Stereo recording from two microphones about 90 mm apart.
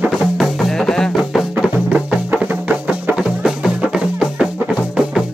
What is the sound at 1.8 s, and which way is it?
Music, 15° right (ahead or behind).